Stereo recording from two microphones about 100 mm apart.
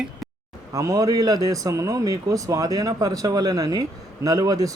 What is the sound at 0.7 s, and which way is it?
A man's voice, 35° right (ahead or behind).